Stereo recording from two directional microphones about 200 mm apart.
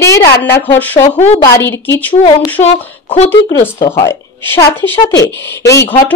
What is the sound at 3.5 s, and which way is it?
A woman's voice, 15° left (ahead or behind).